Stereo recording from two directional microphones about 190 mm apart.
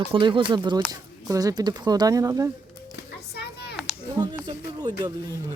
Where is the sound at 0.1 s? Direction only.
25° right (ahead or behind).